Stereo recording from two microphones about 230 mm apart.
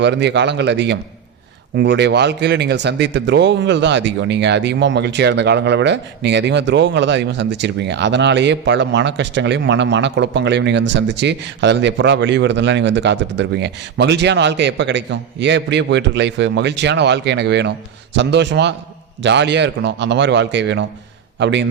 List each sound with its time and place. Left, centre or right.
0.0 s a man's voice: right